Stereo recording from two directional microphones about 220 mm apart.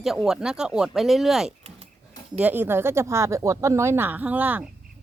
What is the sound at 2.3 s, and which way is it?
Speech, 10° right (ahead or behind).